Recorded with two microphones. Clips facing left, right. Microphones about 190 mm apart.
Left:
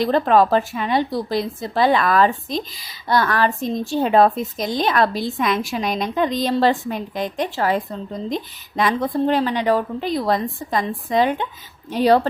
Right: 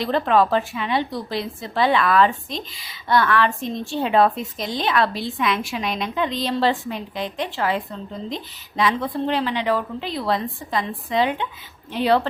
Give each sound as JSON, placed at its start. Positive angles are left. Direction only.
{"t": 0.0, "sound": "a woman's voice", "side_deg": 40}